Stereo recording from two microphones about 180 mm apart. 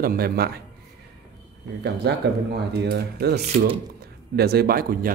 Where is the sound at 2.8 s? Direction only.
65° right (ahead or behind).